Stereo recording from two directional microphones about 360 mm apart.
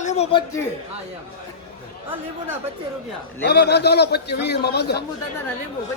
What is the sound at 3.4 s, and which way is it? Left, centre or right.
A man's voice, left.